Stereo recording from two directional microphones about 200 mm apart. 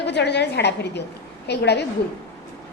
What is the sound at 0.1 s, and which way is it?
A child's voice, 60° left (ahead or behind).